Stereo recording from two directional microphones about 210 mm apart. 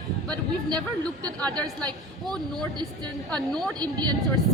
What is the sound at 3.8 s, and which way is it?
Speech, 20° right (ahead or behind).